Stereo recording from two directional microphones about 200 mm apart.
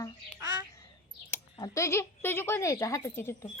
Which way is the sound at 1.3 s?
15° left (ahead or behind).